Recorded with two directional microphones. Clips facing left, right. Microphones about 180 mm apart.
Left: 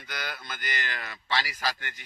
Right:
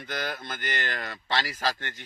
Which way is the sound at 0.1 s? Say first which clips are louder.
Right 5 dB; 45° right (ahead or behind).